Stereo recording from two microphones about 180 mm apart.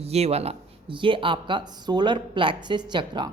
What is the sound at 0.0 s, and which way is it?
Speech, 35° right (ahead or behind).